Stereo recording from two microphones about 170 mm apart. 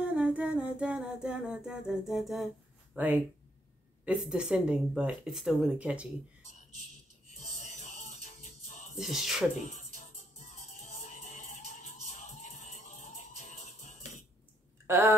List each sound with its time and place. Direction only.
0.0 s humming: 5° right (ahead or behind)
4.0 s speech: 5° right (ahead or behind)
7.5 s music: 45° left (ahead or behind)
8.9 s speech: centre (ahead or behind)
9.7 s music: 45° left (ahead or behind)
14.9 s speech: 15° right (ahead or behind)